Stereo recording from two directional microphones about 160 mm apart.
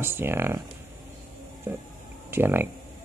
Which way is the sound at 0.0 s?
15° right (ahead or behind).